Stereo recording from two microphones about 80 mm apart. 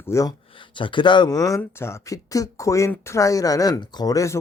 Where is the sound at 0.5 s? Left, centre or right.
Left.